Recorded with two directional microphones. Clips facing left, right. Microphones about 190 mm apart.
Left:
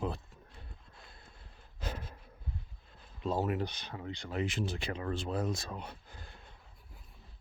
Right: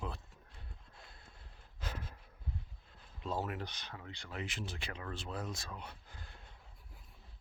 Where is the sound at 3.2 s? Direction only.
25° left (ahead or behind).